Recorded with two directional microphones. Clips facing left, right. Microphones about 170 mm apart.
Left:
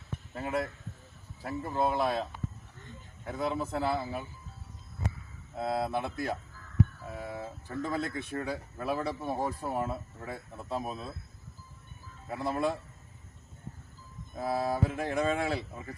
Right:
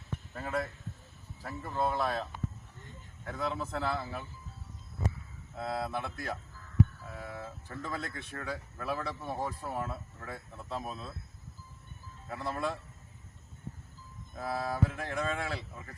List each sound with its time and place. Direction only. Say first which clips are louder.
0.3 s speech: left 3 dB; 20° left (ahead or behind)
3.2 s speech: left 3 dB; 15° left (ahead or behind)
5.5 s speech: left 4 dB; 25° left (ahead or behind)
12.3 s speech: left 4 dB; 15° left (ahead or behind)
14.3 s speech: left 3 dB; 25° left (ahead or behind)